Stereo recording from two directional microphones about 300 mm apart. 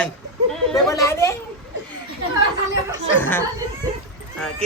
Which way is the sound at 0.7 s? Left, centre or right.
Centre.